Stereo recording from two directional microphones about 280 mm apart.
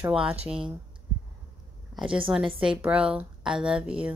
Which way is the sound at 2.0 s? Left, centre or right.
Centre.